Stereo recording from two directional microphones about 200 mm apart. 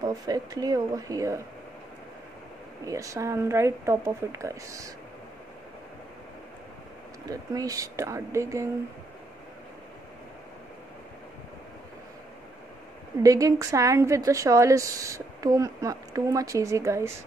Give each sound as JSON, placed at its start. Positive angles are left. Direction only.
{"t": 0.0, "sound": "a woman's voice", "side_deg": -20}
{"t": 2.8, "sound": "a woman's voice", "side_deg": -15}
{"t": 7.2, "sound": "a woman's voice", "side_deg": -15}
{"t": 13.2, "sound": "a woman's voice", "side_deg": -15}